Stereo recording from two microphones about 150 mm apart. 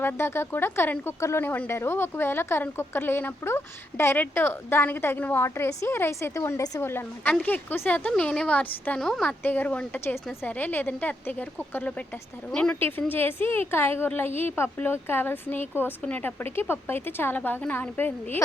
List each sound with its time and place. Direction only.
0.0 s speech: 15° left (ahead or behind)